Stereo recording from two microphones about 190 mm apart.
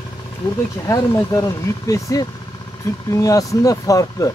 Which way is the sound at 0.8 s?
15° left (ahead or behind).